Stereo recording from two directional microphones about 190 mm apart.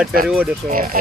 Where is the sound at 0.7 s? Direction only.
45° right (ahead or behind).